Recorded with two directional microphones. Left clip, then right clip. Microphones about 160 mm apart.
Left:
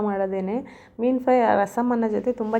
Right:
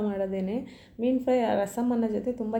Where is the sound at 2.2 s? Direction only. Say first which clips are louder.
Left 6 dB; 15° left (ahead or behind).